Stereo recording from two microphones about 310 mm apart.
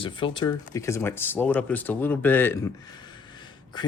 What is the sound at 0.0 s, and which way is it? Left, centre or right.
Speech, centre.